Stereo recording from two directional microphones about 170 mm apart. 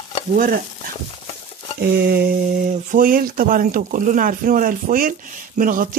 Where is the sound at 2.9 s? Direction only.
55° right (ahead or behind).